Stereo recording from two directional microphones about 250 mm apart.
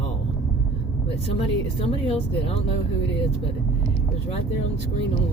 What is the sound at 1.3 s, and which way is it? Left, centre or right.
Speech, left.